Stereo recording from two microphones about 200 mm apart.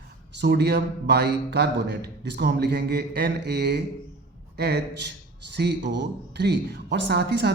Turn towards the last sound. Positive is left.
turn(degrees=-55)  # may be behind; listen again after turning